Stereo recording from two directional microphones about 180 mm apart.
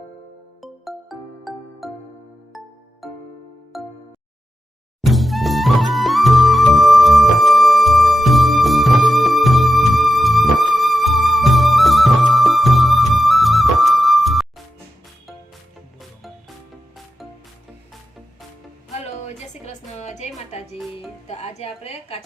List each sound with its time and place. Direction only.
0.6 s music: centre (ahead or behind)
4.9 s music: centre (ahead or behind)
18.9 s music: 40° left (ahead or behind)
21.2 s a sound: 35° left (ahead or behind)